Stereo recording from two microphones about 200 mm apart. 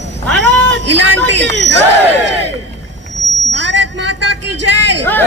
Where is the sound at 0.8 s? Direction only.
65° right (ahead or behind).